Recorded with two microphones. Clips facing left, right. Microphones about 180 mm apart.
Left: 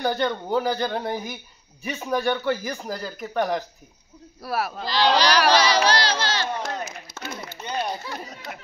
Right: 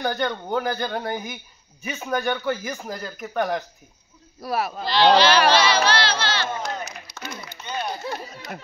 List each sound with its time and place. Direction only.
0.0 s speech: centre (ahead or behind)
4.8 s speech: 40° left (ahead or behind)
5.5 s a sound: 40° left (ahead or behind)